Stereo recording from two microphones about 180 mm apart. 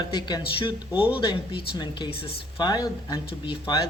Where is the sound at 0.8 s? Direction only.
10° right (ahead or behind).